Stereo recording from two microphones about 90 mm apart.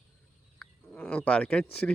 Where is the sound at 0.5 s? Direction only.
10° left (ahead or behind).